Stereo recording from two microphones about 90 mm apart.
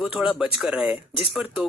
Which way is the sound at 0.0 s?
10° right (ahead or behind).